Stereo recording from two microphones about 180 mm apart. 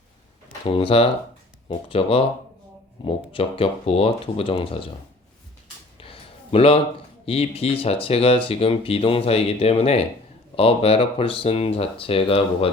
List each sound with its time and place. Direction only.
0.6 s speech: 30° left (ahead or behind)
6.0 s a sound: 30° left (ahead or behind)
7.3 s speech: 35° left (ahead or behind)